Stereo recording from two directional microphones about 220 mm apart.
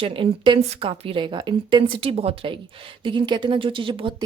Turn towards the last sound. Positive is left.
turn(degrees=-20)  # may be behind; listen again after turning